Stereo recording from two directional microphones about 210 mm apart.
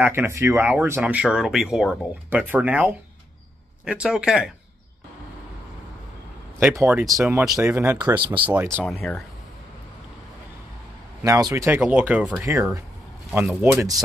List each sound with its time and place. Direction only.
0.0 s speech: 10° right (ahead or behind)
6.7 s speech: 10° right (ahead or behind)
8.8 s speech: 5° left (ahead or behind)
11.2 s speech: 15° right (ahead or behind)